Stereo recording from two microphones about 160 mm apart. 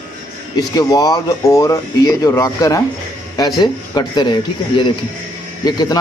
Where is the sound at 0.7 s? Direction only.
25° left (ahead or behind).